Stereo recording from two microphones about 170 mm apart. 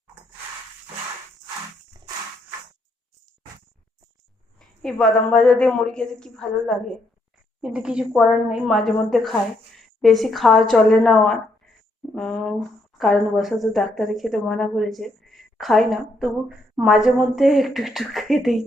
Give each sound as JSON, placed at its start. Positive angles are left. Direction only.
{"t": 4.8, "sound": "a woman's voice", "side_deg": 5}